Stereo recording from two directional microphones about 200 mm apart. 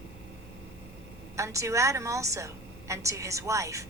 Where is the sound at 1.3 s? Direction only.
15° right (ahead or behind).